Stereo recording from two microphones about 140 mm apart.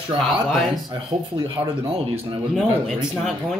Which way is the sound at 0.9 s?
35° right (ahead or behind).